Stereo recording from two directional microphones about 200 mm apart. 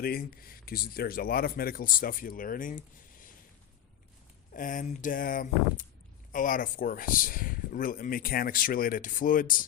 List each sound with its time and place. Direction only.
0.0 s speech: 50° left (ahead or behind)
4.5 s speech: 40° left (ahead or behind)